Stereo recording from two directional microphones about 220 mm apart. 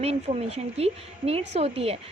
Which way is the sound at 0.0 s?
30° right (ahead or behind).